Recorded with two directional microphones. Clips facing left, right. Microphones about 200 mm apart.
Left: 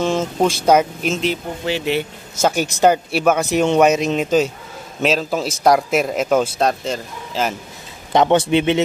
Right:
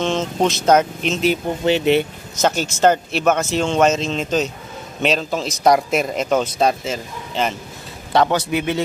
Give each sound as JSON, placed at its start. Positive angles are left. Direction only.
{"t": 0.0, "sound": "speech", "side_deg": 10}
{"t": 1.7, "sound": "speech", "side_deg": -20}
{"t": 2.5, "sound": "speech", "side_deg": 15}
{"t": 8.1, "sound": "speech", "side_deg": 20}